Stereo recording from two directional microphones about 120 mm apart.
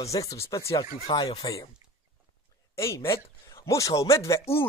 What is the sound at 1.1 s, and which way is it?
Speech, 40° left (ahead or behind).